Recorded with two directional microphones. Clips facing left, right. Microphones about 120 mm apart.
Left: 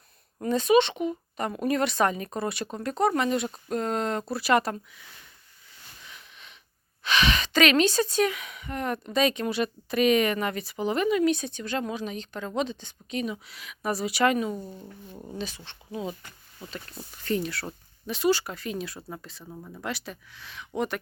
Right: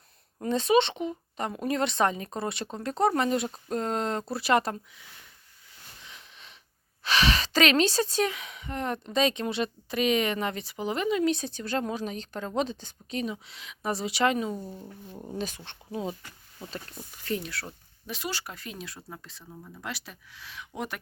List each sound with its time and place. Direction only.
0.4 s speech: 30° right (ahead or behind)
7.0 s speech: 35° right (ahead or behind)
14.5 s speech: 5° right (ahead or behind)
15.4 s speech: 50° right (ahead or behind)
17.2 s speech: centre (ahead or behind)